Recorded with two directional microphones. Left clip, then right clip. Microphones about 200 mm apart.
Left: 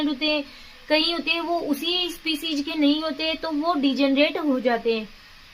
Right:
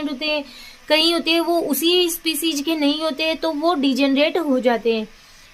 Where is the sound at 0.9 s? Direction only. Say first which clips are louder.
Right 5 dB; 45° right (ahead or behind).